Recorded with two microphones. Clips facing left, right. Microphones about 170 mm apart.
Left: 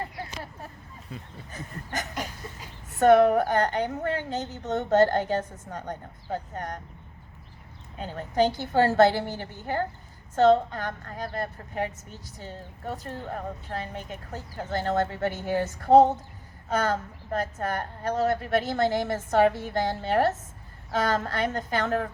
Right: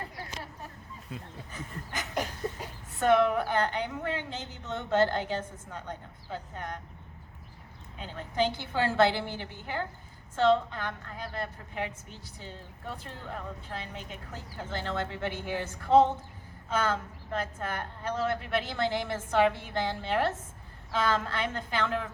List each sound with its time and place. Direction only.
1.1 s speech: centre (ahead or behind)
1.5 s a woman's voice: 45° left (ahead or behind)
7.9 s a woman's voice: 45° left (ahead or behind)